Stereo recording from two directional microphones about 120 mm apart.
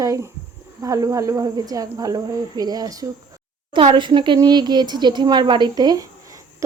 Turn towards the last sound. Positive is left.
turn(degrees=-30)  # may be behind; listen again after turning